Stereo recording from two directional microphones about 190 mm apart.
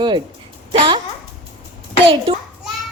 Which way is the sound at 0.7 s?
25° right (ahead or behind).